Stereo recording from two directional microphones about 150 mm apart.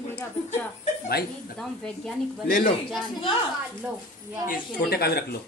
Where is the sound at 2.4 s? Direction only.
65° left (ahead or behind).